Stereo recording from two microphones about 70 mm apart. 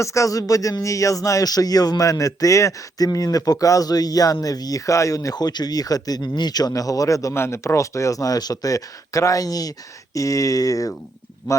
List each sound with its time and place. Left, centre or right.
0.0 s speech: left
5.3 s speech: left
7.3 s speech: left